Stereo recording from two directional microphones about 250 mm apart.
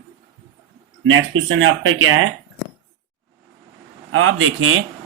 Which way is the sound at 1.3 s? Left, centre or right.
Right.